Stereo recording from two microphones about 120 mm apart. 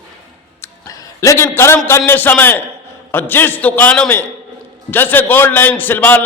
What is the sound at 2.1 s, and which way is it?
A man's voice, 15° left (ahead or behind).